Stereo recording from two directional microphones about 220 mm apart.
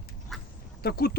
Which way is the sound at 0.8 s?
45° left (ahead or behind).